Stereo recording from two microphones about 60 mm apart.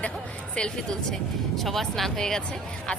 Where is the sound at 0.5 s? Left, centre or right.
Centre.